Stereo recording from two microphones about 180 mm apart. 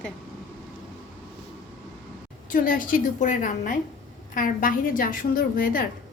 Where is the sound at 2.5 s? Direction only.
50° left (ahead or behind).